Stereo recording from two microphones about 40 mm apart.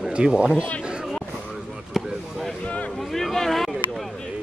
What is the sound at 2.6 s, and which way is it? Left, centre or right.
Speech, left.